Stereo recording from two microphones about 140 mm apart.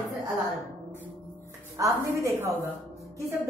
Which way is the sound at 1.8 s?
20° right (ahead or behind).